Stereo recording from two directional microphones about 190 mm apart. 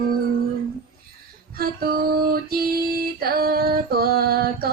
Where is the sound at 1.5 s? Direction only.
50° right (ahead or behind).